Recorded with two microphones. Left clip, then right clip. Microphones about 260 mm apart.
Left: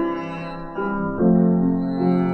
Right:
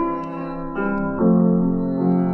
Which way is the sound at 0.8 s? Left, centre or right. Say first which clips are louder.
Right 1 dB; centre.